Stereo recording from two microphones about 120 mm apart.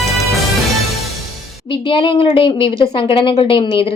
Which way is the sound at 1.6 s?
45° left (ahead or behind).